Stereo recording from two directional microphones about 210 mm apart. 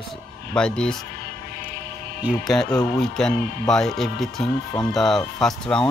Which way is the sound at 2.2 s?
Centre (ahead or behind).